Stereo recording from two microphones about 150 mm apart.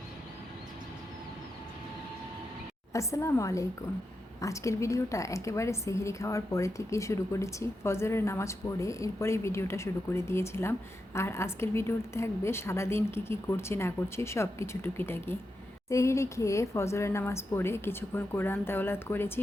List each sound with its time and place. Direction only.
2.9 s a woman's voice: 20° left (ahead or behind)